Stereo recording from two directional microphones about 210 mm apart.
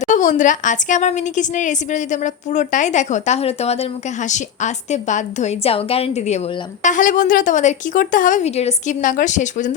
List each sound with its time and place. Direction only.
0.0 s a woman's voice: 35° left (ahead or behind)